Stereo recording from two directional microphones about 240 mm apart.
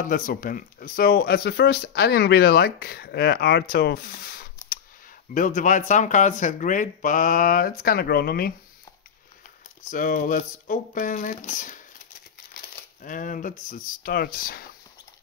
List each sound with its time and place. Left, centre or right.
0.0 s speech: left
9.8 s speech: left
13.0 s speech: left